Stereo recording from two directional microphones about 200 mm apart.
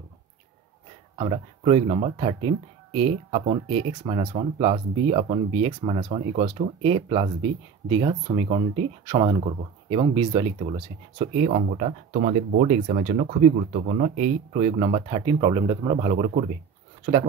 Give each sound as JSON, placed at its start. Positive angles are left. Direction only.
{"t": 1.1, "sound": "speech", "side_deg": -25}